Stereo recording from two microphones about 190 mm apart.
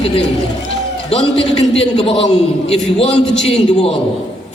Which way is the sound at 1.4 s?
30° left (ahead or behind).